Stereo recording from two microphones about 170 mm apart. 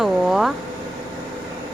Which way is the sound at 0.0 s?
Centre (ahead or behind).